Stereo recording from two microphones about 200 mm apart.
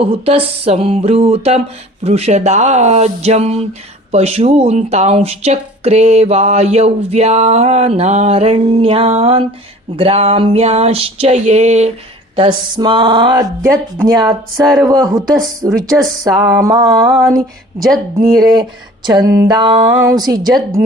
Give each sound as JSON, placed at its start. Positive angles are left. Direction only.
{"t": 0.0, "sound": "speech", "side_deg": -30}
{"t": 12.4, "sound": "speech", "side_deg": -25}
{"t": 14.8, "sound": "a sound", "side_deg": -20}
{"t": 17.2, "sound": "speech", "side_deg": -20}